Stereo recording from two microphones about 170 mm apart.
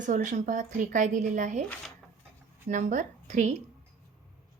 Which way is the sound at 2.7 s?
45° right (ahead or behind).